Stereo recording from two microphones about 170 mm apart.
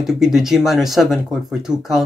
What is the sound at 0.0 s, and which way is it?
Speech, centre (ahead or behind).